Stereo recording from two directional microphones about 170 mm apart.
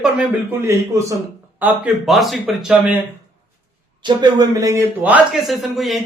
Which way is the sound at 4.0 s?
25° right (ahead or behind).